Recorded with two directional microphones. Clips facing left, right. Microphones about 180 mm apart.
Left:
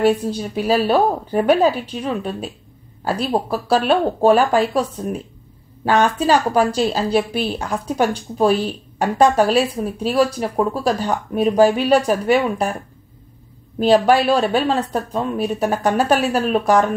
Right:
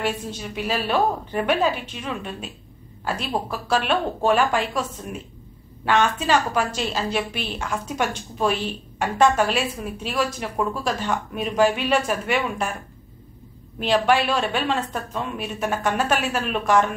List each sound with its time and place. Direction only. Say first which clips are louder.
0.0 s speech: left 10 dB; 35° left (ahead or behind)
13.7 s speech: left 6 dB; 35° left (ahead or behind)